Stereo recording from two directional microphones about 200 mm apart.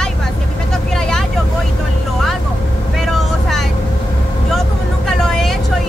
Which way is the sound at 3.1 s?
Centre (ahead or behind).